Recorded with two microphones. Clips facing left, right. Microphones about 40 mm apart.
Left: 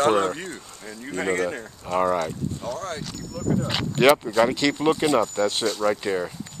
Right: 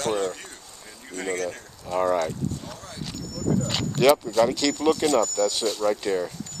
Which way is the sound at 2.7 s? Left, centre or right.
Left.